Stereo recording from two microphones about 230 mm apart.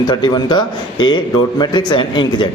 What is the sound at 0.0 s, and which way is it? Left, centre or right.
A man's voice, centre.